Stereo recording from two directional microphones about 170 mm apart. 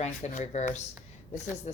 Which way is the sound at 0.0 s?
40° left (ahead or behind).